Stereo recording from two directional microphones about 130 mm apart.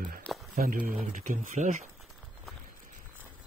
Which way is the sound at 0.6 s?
90° right.